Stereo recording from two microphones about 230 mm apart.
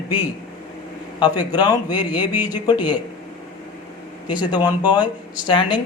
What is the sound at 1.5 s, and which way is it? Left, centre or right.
Speech, centre.